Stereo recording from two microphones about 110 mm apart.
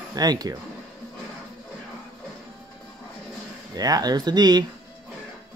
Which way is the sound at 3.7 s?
35° right (ahead or behind).